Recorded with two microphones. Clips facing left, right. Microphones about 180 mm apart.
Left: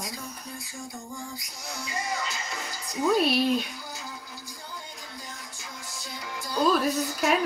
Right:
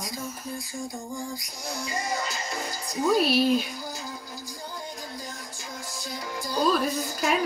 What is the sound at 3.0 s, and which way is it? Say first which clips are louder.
Speech: right 1 dB; centre (ahead or behind).